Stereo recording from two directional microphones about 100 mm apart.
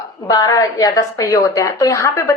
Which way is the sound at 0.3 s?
40° left (ahead or behind).